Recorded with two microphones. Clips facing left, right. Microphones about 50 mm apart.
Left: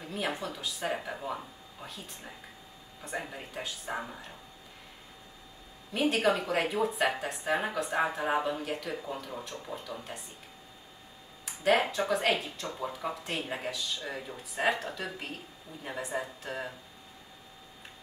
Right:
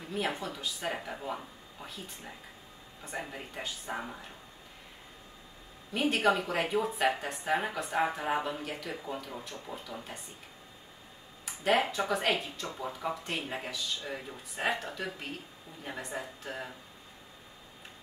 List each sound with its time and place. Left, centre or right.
0.1 s a woman's voice: centre
3.1 s a woman's voice: centre
5.9 s a woman's voice: centre
8.4 s speech: centre
8.9 s a woman's voice: centre
11.4 s a woman's voice: centre